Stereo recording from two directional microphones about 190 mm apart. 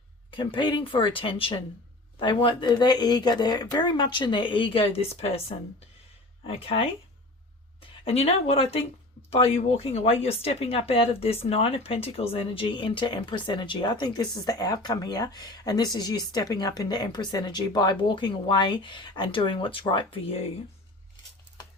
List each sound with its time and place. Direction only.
0.3 s speech: 25° left (ahead or behind)